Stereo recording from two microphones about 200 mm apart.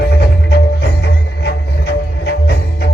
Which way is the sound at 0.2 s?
55° left (ahead or behind).